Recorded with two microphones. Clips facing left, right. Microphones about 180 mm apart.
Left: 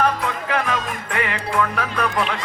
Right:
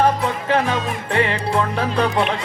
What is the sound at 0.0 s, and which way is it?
Music, 30° right (ahead or behind).